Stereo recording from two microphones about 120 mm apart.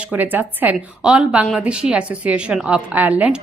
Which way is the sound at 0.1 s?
15° right (ahead or behind).